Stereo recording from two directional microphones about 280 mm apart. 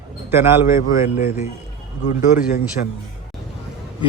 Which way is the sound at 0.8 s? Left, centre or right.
Left.